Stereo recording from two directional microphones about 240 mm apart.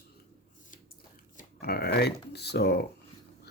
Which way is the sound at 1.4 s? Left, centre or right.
Left.